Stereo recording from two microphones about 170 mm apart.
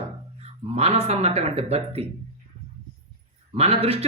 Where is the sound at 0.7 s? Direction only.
35° right (ahead or behind).